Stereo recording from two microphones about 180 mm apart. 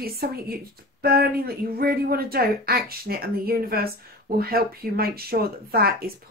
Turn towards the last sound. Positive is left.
turn(degrees=-55)  # may be behind; listen again after turning